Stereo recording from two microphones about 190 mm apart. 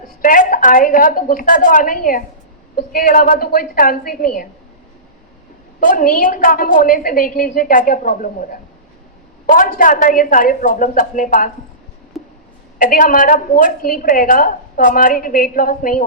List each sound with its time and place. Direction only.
0.2 s a woman's voice: 45° left (ahead or behind)
5.8 s a woman's voice: 45° left (ahead or behind)
12.8 s a woman's voice: 45° left (ahead or behind)